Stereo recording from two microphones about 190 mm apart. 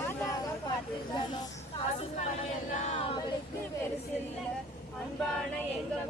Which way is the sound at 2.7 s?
35° left (ahead or behind).